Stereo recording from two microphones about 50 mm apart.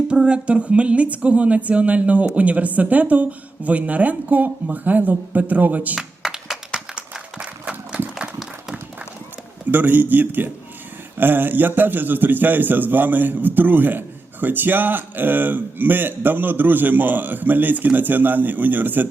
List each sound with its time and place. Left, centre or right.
0.1 s speech: right
6.0 s a sound: centre
7.6 s applause: right
9.7 s speech: right